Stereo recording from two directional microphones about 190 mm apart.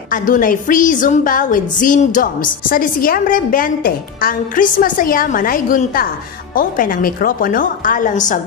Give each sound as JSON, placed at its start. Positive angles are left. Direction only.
{"t": 0.1, "sound": "a woman's voice", "side_deg": 45}